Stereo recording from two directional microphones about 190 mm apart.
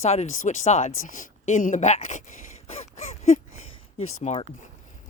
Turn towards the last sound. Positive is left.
turn(degrees=40)  # may be behind; listen again after turning